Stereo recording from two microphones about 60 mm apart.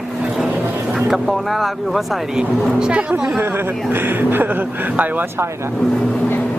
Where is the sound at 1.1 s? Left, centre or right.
Centre.